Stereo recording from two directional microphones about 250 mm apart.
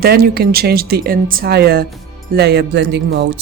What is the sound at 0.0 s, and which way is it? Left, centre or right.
Speech, right.